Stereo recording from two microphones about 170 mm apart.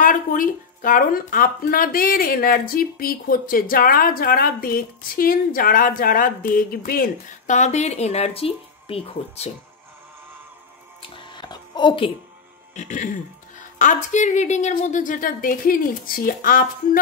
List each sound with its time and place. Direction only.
0.0 s speech: 55° left (ahead or behind); by 9.5 s 35° left (ahead or behind)
11.0 s music: 30° left (ahead or behind)
12.7 s a woman's voice: 45° left (ahead or behind)